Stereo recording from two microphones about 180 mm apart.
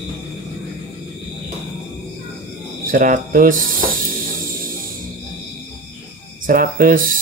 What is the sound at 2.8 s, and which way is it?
Speech, 50° right (ahead or behind).